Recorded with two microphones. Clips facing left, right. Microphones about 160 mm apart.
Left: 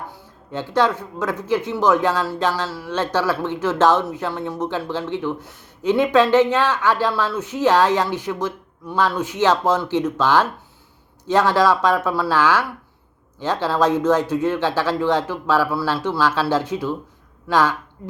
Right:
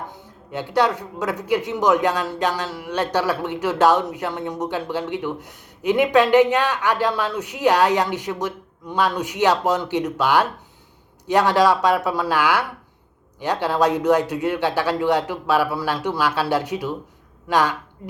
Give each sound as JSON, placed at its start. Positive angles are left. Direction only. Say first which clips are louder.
{"t": 0.1, "sound": "speech", "louder": "left 1 dB", "side_deg": -15}